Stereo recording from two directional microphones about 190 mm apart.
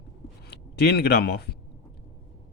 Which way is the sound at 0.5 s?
55° left (ahead or behind).